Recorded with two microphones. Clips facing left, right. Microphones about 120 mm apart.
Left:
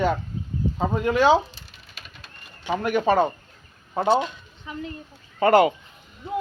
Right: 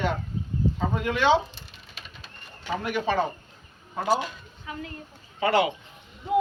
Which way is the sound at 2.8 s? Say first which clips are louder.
Left 6 dB; 50° left (ahead or behind).